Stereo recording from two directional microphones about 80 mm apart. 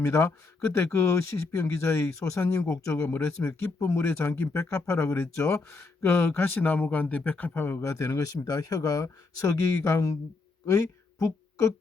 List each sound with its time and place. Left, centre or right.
0.0 s speech: left